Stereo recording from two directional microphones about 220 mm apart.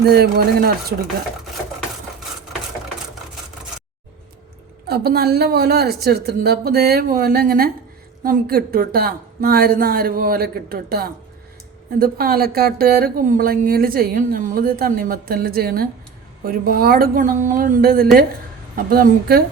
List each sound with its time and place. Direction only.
0.0 s speech: 45° right (ahead or behind)
4.9 s speech: 45° right (ahead or behind)